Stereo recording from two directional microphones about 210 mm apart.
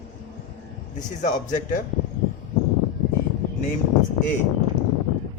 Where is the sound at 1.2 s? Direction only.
35° left (ahead or behind).